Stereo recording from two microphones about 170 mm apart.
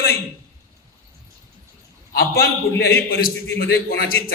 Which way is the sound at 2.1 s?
65° left (ahead or behind).